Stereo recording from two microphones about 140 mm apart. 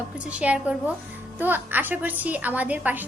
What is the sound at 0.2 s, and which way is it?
A woman's voice, 10° right (ahead or behind).